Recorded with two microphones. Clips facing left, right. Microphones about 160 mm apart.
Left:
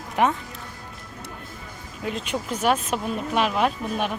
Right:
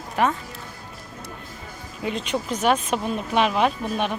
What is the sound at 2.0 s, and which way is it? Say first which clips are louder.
Speech: right 2 dB; centre (ahead or behind).